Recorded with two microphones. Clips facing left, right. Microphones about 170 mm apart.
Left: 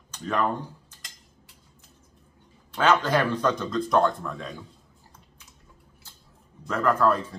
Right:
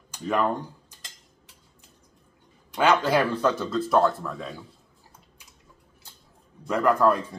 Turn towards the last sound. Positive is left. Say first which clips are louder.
# right 2 dB
turn(degrees=-10)  # may be behind; listen again after turning